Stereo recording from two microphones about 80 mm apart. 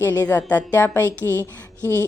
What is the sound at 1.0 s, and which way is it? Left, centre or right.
Speech, right.